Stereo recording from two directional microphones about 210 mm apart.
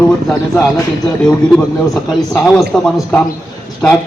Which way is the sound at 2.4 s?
5° left (ahead or behind).